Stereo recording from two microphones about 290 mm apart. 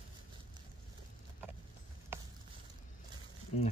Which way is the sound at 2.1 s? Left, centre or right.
Centre.